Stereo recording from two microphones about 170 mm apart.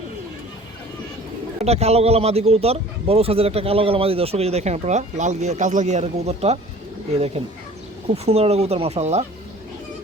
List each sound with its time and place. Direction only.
1.6 s a man's voice: 40° right (ahead or behind)